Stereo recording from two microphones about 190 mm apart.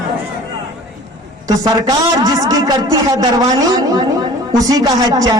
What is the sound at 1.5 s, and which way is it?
A man's voice, 20° right (ahead or behind).